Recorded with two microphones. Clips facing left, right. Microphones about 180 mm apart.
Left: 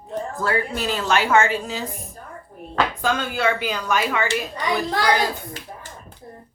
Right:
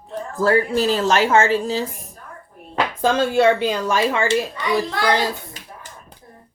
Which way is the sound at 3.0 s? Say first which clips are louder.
Right 6 dB; 30° right (ahead or behind).